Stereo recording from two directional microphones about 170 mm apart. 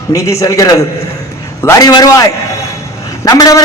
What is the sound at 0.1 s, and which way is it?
A man's voice, 20° left (ahead or behind).